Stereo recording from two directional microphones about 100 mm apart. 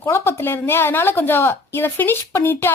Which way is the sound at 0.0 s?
25° left (ahead or behind).